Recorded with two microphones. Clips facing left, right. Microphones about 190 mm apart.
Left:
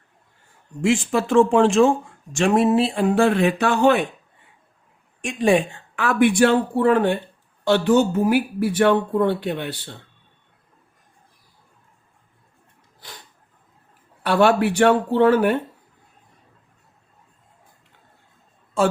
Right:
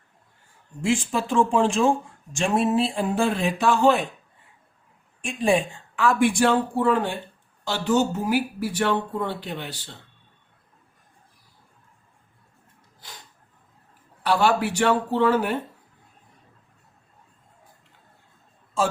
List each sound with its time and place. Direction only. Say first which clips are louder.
0.8 s speech: left 4 dB; 70° left (ahead or behind)
5.2 s speech: left 4 dB; 70° left (ahead or behind)
14.3 s speech: left 4 dB; 60° left (ahead or behind)